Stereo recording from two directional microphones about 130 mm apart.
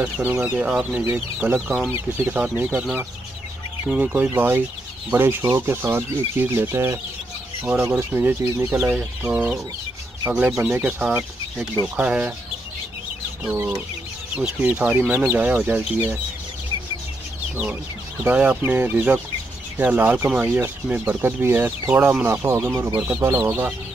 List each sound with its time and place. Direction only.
0.0 s speech: 15° right (ahead or behind)
8.0 s speech: 15° right (ahead or behind)
13.6 s speech: 10° right (ahead or behind)
18.2 s speech: 15° right (ahead or behind)